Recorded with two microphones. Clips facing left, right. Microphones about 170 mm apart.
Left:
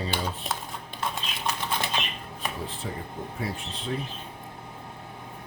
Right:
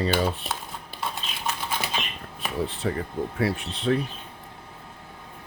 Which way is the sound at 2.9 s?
70° right (ahead or behind).